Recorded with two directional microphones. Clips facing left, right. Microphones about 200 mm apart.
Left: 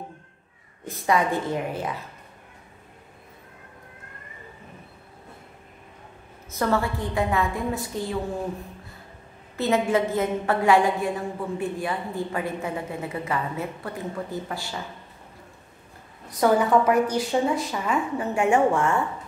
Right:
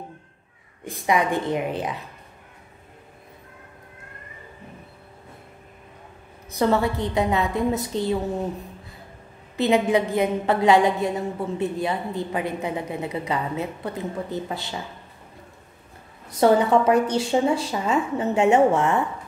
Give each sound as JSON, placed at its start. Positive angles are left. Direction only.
{"t": 0.8, "sound": "a woman's voice", "side_deg": -15}
{"t": 6.5, "sound": "a woman's voice", "side_deg": -20}
{"t": 9.6, "sound": "a woman's voice", "side_deg": -15}
{"t": 16.3, "sound": "a woman's voice", "side_deg": -25}